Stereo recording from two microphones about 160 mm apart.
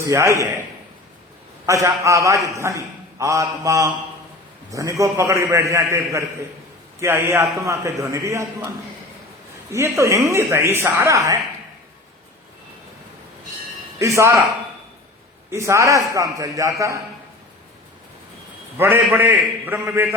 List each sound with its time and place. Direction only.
0.0 s a man's voice: 15° right (ahead or behind)
1.6 s a man's voice: 20° right (ahead or behind)
9.7 s a man's voice: 15° right (ahead or behind)
14.0 s a man's voice: 20° right (ahead or behind)
15.4 s a man's voice: 15° right (ahead or behind)
18.8 s a man's voice: 15° right (ahead or behind)